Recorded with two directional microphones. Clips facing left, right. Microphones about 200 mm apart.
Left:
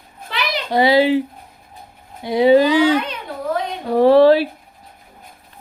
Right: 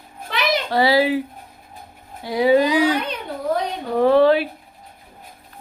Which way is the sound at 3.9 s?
35° left (ahead or behind).